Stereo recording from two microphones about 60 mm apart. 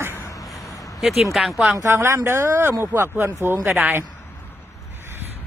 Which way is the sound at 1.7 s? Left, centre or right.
Right.